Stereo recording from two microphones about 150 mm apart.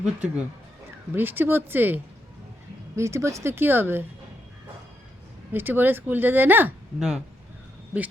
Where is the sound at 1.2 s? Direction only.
15° right (ahead or behind).